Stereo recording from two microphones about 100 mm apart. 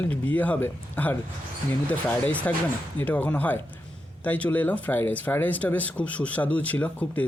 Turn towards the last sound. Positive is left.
turn(degrees=15)  # may be behind; listen again after turning